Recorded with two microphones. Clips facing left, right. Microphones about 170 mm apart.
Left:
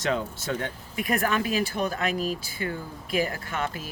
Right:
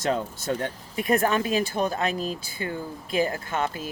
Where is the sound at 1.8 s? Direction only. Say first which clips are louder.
Right 2 dB; 45° right (ahead or behind).